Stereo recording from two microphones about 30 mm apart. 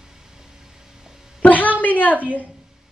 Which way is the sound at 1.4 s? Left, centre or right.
Left.